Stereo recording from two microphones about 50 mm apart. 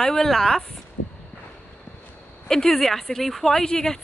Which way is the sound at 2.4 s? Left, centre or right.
Centre.